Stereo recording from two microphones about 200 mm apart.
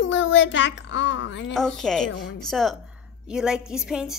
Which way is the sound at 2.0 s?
65° left (ahead or behind).